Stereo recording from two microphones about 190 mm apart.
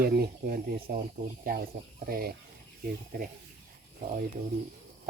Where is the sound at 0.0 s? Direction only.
50° right (ahead or behind).